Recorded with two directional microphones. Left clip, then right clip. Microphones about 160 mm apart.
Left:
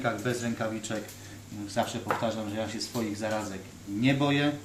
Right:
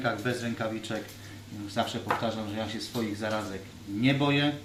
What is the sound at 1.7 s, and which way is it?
Speech, 5° left (ahead or behind).